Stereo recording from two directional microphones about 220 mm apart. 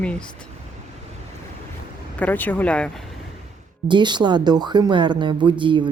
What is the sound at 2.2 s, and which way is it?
Speech, 5° left (ahead or behind).